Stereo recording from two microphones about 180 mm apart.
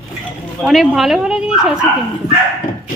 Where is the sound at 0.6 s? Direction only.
Centre (ahead or behind).